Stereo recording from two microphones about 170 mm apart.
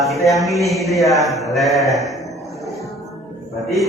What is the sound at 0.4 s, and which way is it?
Mantra, centre (ahead or behind).